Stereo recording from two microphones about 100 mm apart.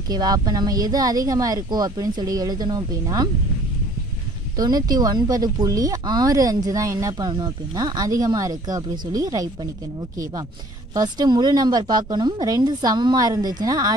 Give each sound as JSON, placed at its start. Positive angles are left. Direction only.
{"t": 0.1, "sound": "speech", "side_deg": -40}
{"t": 4.6, "sound": "speech", "side_deg": -40}